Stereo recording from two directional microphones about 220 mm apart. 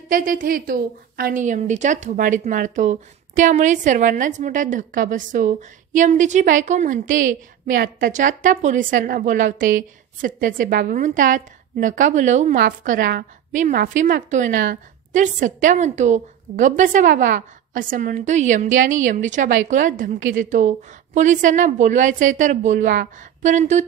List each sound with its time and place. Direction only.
0.1 s a woman's voice: 40° right (ahead or behind)